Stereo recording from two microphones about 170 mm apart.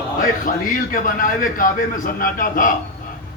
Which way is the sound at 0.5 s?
50° left (ahead or behind).